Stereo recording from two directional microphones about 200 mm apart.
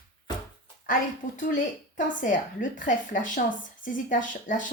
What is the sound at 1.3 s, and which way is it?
A woman's voice, 40° left (ahead or behind).